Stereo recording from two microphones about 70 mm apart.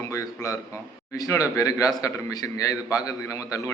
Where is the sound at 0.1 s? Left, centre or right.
Left.